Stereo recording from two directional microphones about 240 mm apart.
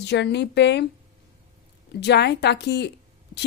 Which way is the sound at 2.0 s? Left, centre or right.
Left.